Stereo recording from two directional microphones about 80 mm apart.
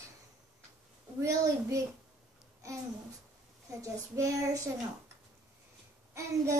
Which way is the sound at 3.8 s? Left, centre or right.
Right.